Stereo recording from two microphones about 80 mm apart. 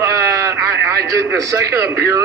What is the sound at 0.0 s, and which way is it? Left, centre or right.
A man's voice, right.